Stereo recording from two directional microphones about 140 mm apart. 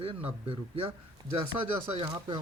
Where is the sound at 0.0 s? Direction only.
40° right (ahead or behind).